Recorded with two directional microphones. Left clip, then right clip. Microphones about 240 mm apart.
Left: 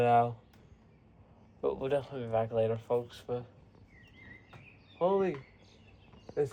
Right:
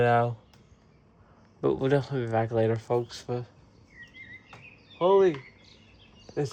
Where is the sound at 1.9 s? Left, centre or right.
Right.